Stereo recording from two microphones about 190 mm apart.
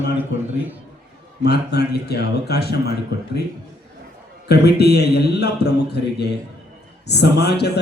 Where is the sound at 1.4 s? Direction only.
60° left (ahead or behind).